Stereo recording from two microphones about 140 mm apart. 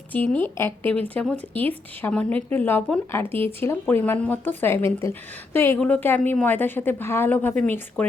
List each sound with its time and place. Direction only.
0.1 s speech: 10° left (ahead or behind)